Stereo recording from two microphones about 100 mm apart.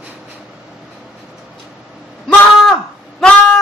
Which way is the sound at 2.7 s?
5° left (ahead or behind).